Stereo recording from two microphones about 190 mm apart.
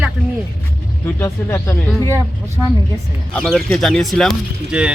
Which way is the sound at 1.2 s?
15° left (ahead or behind).